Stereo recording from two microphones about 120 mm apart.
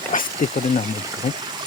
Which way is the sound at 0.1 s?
90° left.